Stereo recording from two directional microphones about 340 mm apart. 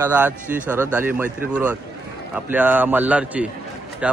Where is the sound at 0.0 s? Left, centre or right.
Centre.